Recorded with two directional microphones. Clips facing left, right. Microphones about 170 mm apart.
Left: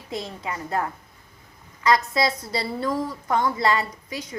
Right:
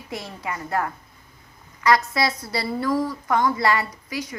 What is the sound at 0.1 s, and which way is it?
A woman's voice, 20° left (ahead or behind).